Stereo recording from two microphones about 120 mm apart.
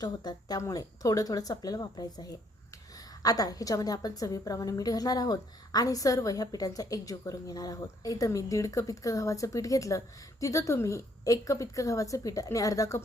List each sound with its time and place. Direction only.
0.0 s a woman's voice: 35° left (ahead or behind)